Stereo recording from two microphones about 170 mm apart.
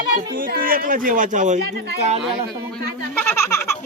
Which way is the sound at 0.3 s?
55° right (ahead or behind).